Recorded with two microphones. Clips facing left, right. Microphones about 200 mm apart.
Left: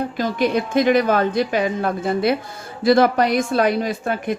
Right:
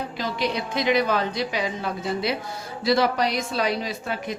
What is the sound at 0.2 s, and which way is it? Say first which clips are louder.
A woman's voice: left 7 dB; 50° left (ahead or behind).